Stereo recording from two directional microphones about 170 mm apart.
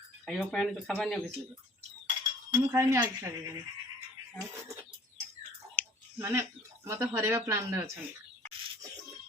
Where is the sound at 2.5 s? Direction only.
20° right (ahead or behind).